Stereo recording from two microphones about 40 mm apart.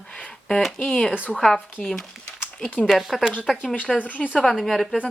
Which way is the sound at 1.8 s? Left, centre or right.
Left.